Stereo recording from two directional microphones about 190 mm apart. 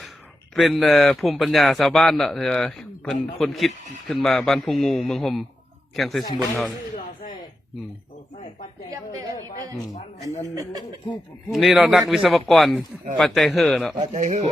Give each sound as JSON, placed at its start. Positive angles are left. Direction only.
{"t": 0.5, "sound": "a man's voice", "side_deg": 0}
{"t": 8.9, "sound": "a woman's voice", "side_deg": -15}
{"t": 11.5, "sound": "a man's voice", "side_deg": 0}
{"t": 14.0, "sound": "speech", "side_deg": -40}